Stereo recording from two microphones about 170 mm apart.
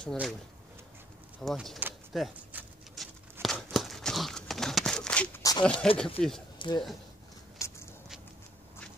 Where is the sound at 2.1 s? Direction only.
Centre (ahead or behind).